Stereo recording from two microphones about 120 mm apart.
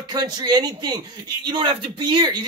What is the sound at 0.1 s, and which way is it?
A man's voice, 35° right (ahead or behind).